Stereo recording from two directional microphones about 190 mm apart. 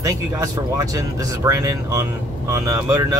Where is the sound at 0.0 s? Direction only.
15° right (ahead or behind).